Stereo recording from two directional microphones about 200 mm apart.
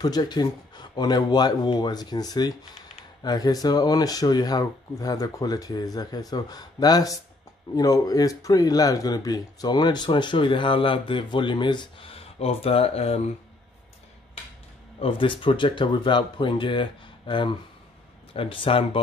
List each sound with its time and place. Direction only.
0.0 s speech: 20° left (ahead or behind)
15.0 s speech: 25° left (ahead or behind)